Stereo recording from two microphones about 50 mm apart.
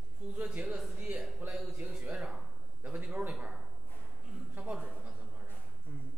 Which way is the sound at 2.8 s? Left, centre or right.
Right.